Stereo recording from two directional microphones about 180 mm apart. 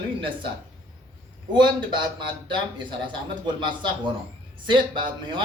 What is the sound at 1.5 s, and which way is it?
Speech, 25° right (ahead or behind).